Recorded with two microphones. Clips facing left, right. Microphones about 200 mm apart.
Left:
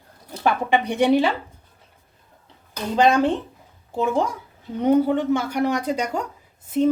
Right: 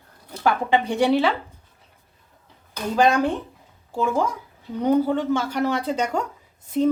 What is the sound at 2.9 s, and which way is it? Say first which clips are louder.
A woman's voice: left 2 dB; 20° left (ahead or behind).